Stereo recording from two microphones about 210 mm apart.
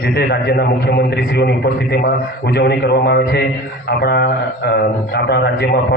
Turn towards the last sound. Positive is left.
turn(degrees=50)  # may be behind; listen again after turning